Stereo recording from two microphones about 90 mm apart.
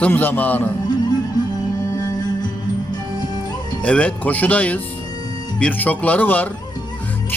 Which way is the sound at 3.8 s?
15° left (ahead or behind).